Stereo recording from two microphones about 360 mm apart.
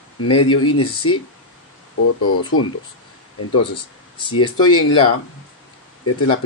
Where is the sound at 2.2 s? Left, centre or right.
Left.